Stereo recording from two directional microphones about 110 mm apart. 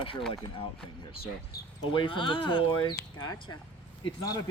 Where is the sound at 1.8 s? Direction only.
50° left (ahead or behind).